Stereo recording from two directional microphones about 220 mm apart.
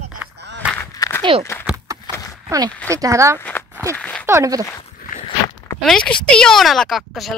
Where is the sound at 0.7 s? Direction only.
15° left (ahead or behind).